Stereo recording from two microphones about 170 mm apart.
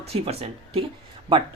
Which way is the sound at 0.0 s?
35° right (ahead or behind).